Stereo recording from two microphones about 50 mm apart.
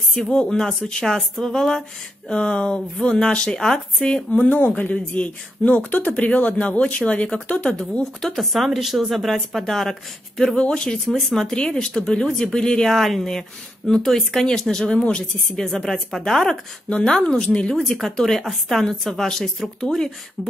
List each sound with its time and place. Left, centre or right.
0.3 s speech: centre
4.3 s speech: left
8.0 s a woman's voice: centre
15.5 s speech: centre